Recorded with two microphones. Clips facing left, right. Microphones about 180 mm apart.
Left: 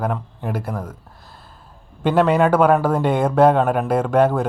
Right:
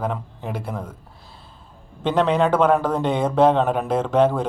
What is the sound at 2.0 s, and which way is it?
Speech, 5° left (ahead or behind).